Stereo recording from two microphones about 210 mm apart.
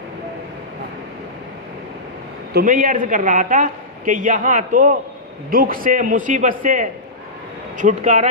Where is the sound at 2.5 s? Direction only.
45° right (ahead or behind).